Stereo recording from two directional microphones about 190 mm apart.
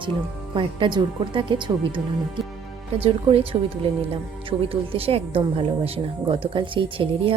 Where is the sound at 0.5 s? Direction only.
25° right (ahead or behind).